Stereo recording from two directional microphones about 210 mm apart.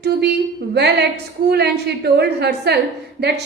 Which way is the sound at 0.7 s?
50° right (ahead or behind).